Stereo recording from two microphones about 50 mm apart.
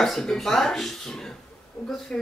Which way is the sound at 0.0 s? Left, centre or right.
Centre.